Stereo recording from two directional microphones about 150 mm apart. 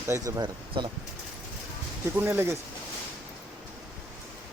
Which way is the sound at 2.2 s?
15° right (ahead or behind).